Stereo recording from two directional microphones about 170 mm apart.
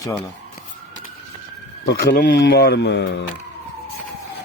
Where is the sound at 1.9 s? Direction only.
60° left (ahead or behind); by 3.2 s 90° left.